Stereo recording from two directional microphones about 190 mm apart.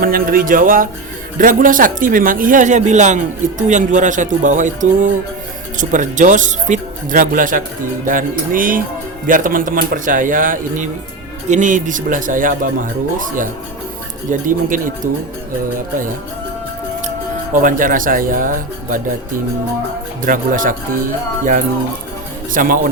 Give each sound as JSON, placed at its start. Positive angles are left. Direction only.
{"t": 0.0, "sound": "speech", "side_deg": -50}
{"t": 17.6, "sound": "speech", "side_deg": -45}
{"t": 20.2, "sound": "speech", "side_deg": -45}
{"t": 22.5, "sound": "speech", "side_deg": -45}